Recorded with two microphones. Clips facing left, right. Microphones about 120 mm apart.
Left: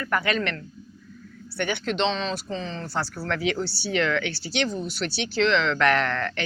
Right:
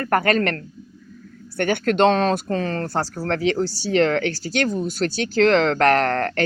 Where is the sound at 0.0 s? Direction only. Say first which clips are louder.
Right 6 dB; 50° right (ahead or behind).